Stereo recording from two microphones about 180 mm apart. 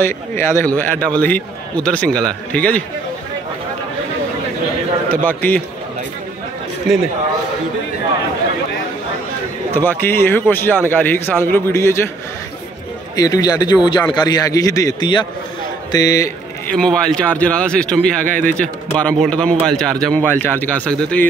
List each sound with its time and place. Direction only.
0.0 s a man's voice: 15° left (ahead or behind)
5.1 s a man's voice: 10° left (ahead or behind)
9.8 s a man's voice: 10° left (ahead or behind)
13.1 s a man's voice: 20° left (ahead or behind)
16.6 s a man's voice: 5° left (ahead or behind)